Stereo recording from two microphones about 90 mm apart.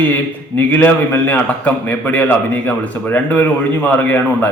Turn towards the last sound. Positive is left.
turn(degrees=20)  # may be behind; listen again after turning